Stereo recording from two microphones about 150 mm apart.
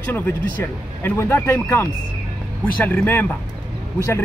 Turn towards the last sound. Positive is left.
turn(degrees=15)  # may be behind; listen again after turning